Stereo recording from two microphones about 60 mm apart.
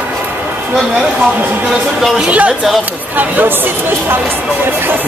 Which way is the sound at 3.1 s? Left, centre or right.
Right.